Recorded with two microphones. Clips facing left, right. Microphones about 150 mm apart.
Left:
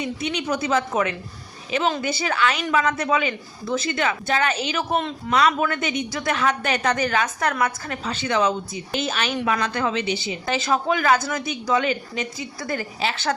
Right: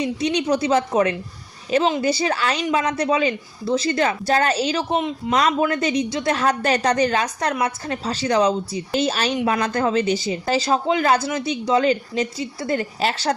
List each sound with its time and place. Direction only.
0.0 s speech: 35° right (ahead or behind)
13.0 s speech: 40° right (ahead or behind)